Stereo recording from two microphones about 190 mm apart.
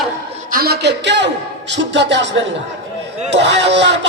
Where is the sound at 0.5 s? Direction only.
55° right (ahead or behind).